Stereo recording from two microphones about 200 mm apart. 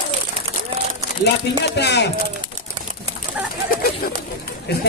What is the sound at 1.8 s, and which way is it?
Speech, 55° left (ahead or behind).